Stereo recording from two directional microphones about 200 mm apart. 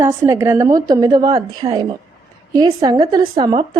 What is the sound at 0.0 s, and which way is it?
A woman's voice, 15° right (ahead or behind).